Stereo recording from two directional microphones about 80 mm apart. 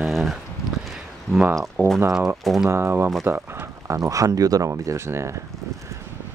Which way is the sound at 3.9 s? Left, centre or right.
Right.